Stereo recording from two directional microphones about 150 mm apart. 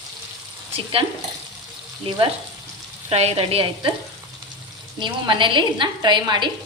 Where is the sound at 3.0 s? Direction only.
45° right (ahead or behind).